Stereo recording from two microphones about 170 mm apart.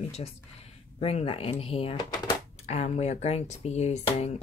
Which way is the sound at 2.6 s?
40° left (ahead or behind).